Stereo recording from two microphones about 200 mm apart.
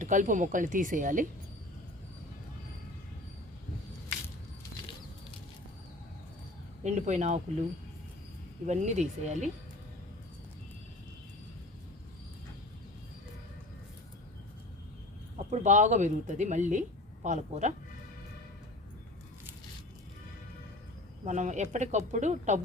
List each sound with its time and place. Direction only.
0.0 s speech: 40° right (ahead or behind)
6.8 s speech: 35° right (ahead or behind)
8.6 s speech: 35° right (ahead or behind)
15.4 s speech: 35° right (ahead or behind)
21.2 s speech: 35° right (ahead or behind)